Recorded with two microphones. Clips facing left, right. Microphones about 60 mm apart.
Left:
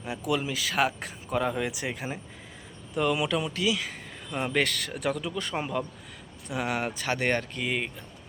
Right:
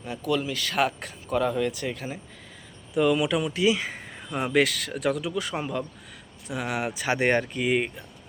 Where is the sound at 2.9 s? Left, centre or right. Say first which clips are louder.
Right 4 dB; centre.